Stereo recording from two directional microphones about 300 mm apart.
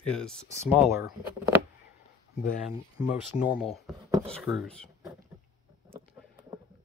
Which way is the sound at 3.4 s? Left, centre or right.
Centre.